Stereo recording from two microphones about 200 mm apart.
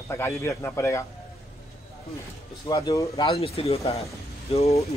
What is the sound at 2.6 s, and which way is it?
Speech, 15° left (ahead or behind).